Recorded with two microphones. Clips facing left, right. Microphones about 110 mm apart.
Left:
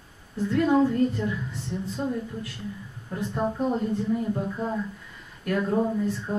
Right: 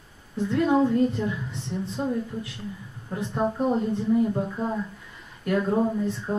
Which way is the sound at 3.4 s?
15° right (ahead or behind).